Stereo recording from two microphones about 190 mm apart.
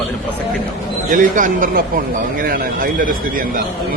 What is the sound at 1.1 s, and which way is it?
Speech, 45° right (ahead or behind).